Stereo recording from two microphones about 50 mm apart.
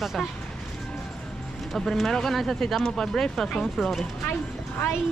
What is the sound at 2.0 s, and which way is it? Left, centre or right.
Speech, centre.